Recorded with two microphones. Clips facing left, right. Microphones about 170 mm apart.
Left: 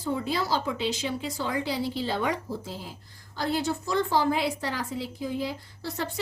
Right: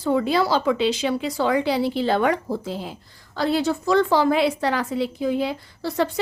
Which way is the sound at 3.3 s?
90° right.